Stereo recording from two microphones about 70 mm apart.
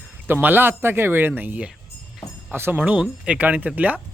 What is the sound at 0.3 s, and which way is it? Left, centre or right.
Speech, right.